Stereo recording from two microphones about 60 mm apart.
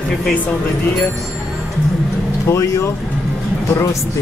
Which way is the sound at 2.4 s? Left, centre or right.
Left.